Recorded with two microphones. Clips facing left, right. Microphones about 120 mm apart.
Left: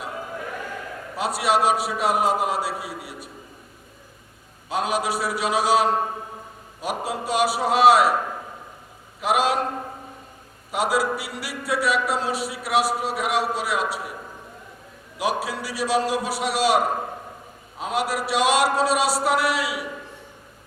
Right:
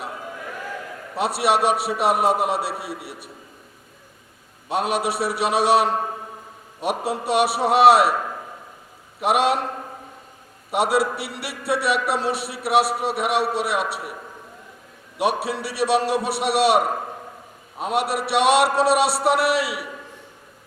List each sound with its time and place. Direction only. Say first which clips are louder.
1.1 s a man's voice: right 2 dB; 65° right (ahead or behind)
4.7 s a man's voice: right 1 dB; 65° right (ahead or behind)
9.2 s a man's voice: right 2 dB; 65° right (ahead or behind)
10.7 s a man's voice: right 2 dB; 65° right (ahead or behind)
15.2 s a man's voice: right 3 dB; 65° right (ahead or behind)